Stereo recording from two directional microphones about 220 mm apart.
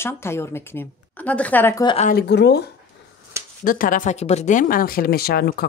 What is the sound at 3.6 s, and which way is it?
Speech, 40° left (ahead or behind).